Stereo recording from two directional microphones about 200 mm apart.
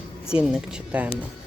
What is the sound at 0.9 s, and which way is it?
Speech, 5° right (ahead or behind).